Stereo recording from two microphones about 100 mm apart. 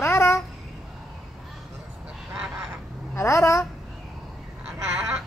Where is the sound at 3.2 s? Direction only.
30° left (ahead or behind).